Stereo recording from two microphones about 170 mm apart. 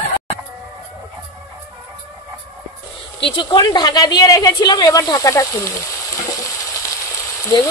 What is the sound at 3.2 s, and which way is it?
A woman's voice, 25° left (ahead or behind).